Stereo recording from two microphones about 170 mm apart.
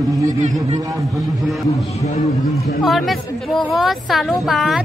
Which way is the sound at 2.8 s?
Centre (ahead or behind).